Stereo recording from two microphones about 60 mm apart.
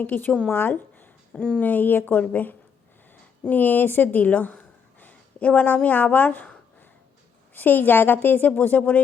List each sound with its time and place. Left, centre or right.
0.0 s a woman's voice: left
0.5 s a sound: left
1.4 s speech: centre
1.6 s a woman's voice: left